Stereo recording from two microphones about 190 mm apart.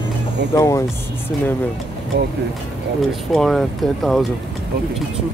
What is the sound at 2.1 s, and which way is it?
Speech, 60° right (ahead or behind).